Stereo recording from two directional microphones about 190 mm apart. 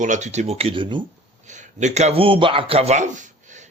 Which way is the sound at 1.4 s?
40° right (ahead or behind).